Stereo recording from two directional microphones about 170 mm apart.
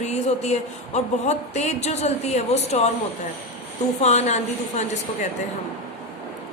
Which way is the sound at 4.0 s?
40° left (ahead or behind).